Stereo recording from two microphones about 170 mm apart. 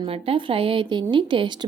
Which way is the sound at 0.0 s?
30° right (ahead or behind).